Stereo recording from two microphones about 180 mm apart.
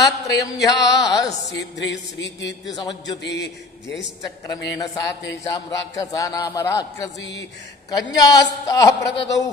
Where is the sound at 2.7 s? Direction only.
25° left (ahead or behind).